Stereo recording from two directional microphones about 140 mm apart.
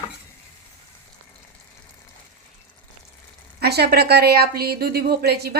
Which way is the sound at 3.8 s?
90° right.